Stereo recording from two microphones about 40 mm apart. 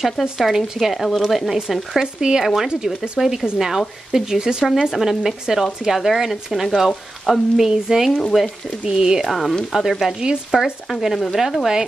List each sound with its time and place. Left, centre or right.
0.0 s speech: centre
2.1 s speech: centre
9.2 s speech: centre